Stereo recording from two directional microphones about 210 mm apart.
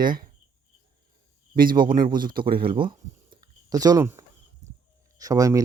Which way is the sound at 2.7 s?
25° right (ahead or behind).